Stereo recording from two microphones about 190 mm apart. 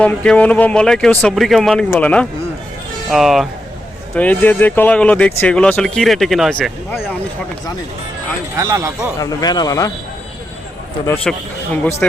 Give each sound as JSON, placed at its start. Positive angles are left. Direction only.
{"t": 0.0, "sound": "speech", "side_deg": 5}
{"t": 8.5, "sound": "speech", "side_deg": -15}
{"t": 9.1, "sound": "speech", "side_deg": 20}
{"t": 11.0, "sound": "speech", "side_deg": 15}